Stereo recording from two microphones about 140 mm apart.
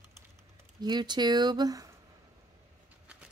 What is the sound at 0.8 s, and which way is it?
Speech, 30° right (ahead or behind).